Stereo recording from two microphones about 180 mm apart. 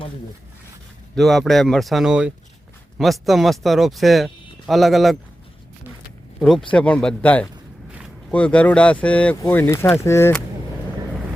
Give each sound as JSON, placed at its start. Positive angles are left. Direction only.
{"t": 1.1, "sound": "speech", "side_deg": 0}
{"t": 6.4, "sound": "speech", "side_deg": 5}